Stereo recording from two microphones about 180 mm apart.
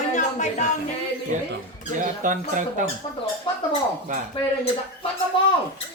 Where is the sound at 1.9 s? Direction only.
45° right (ahead or behind).